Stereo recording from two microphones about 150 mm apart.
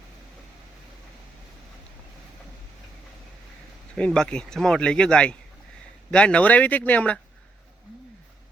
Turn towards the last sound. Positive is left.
turn(degrees=10)  # may be behind; listen again after turning